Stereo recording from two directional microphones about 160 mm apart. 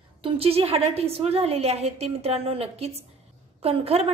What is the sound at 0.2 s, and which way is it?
A woman's voice, 40° right (ahead or behind).